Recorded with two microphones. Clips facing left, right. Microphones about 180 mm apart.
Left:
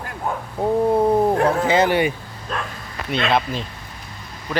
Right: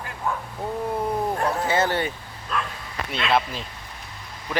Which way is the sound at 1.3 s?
60° left (ahead or behind).